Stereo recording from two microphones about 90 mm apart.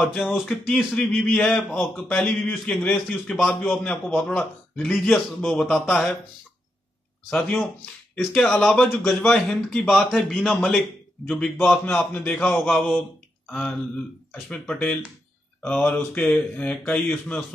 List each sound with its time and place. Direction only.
0.0 s a man's voice: 5° left (ahead or behind)
7.2 s a man's voice: 15° left (ahead or behind)